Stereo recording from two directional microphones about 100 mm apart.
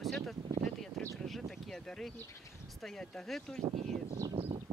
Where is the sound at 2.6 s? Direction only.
5° left (ahead or behind).